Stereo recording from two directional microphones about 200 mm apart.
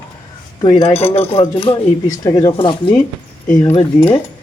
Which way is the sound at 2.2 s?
15° left (ahead or behind).